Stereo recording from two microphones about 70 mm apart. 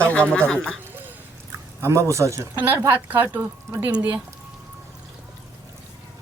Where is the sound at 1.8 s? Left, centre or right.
Right.